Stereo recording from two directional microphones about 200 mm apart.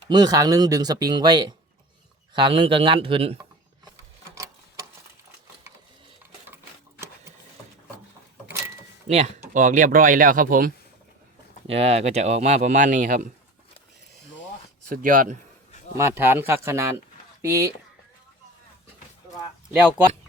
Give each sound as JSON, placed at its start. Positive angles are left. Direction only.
{"t": 0.1, "sound": "speech", "side_deg": -20}
{"t": 9.0, "sound": "speech", "side_deg": -35}
{"t": 11.7, "sound": "speech", "side_deg": -30}
{"t": 14.8, "sound": "speech", "side_deg": -45}
{"t": 16.0, "sound": "speech", "side_deg": -10}